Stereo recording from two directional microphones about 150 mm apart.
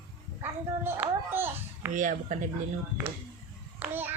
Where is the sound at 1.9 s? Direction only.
60° right (ahead or behind).